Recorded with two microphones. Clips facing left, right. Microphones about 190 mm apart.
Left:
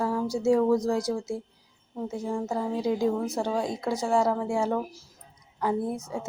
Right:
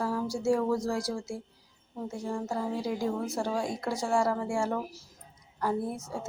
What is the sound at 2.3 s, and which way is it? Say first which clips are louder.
Speech: left 2 dB; 15° left (ahead or behind).